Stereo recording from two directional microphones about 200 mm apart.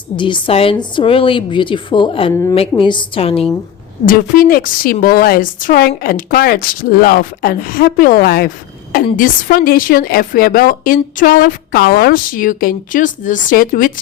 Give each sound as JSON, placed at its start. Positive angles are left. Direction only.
{"t": 0.2, "sound": "a woman's voice", "side_deg": 25}
{"t": 2.3, "sound": "a woman's voice", "side_deg": 15}
{"t": 2.6, "sound": "a woman's voice", "side_deg": 25}
{"t": 4.0, "sound": "a woman's voice", "side_deg": 45}